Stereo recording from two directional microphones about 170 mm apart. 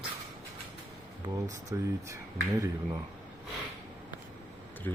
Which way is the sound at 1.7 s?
15° right (ahead or behind).